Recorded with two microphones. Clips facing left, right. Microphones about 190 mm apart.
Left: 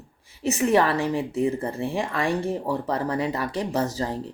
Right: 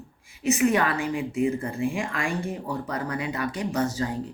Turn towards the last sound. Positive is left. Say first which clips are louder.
# even
turn(degrees=35)  # may be behind; listen again after turning